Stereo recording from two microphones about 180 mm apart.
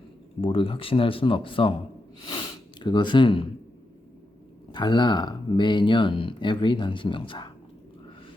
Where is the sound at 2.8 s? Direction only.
25° left (ahead or behind).